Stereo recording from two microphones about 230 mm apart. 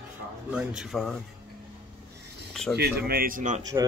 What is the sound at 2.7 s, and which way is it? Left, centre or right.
Speech, right.